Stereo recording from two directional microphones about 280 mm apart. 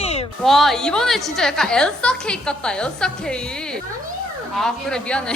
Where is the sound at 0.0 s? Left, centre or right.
Left.